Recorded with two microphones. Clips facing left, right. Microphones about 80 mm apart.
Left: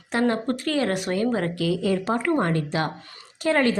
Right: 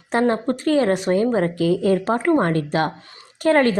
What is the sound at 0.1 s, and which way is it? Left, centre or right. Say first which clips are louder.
Speech: right 4 dB; right.